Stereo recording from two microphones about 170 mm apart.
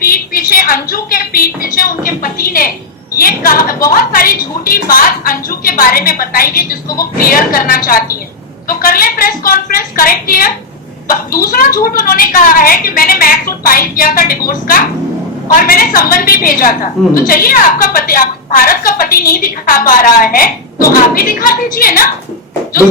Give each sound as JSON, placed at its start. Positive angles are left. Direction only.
{"t": 0.0, "sound": "a woman's voice", "side_deg": 60}